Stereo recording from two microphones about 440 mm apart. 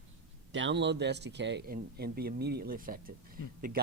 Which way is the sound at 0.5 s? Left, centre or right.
Right.